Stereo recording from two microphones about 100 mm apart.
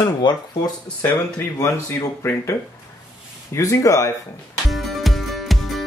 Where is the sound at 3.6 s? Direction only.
30° left (ahead or behind).